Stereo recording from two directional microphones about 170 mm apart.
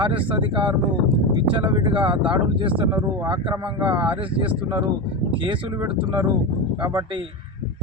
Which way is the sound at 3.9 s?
10° right (ahead or behind).